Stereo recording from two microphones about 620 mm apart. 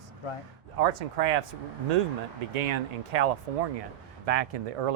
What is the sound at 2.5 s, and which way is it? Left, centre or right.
Speech, right.